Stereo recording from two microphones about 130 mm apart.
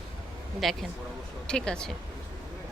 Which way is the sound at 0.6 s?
Centre (ahead or behind).